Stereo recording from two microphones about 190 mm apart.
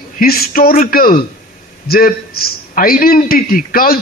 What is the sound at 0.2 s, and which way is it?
A man's voice, 50° left (ahead or behind).